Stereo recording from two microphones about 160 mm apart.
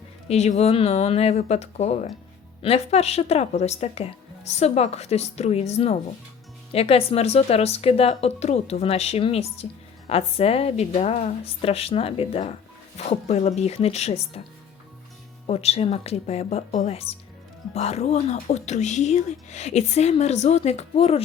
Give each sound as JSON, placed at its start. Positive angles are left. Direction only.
{"t": 0.3, "sound": "speech", "side_deg": 45}
{"t": 15.4, "sound": "speech", "side_deg": 40}